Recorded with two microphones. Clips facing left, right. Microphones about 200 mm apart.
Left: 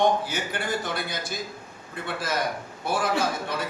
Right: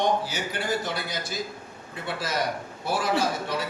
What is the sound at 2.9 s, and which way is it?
Speech, 50° left (ahead or behind).